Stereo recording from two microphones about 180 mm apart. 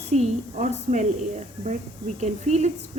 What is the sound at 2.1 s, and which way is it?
Speech, 40° right (ahead or behind).